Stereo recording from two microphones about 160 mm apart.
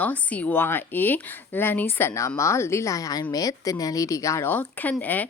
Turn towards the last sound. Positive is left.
turn(degrees=10)  # may be behind; listen again after turning